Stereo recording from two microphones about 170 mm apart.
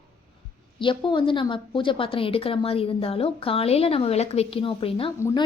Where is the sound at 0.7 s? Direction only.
30° left (ahead or behind).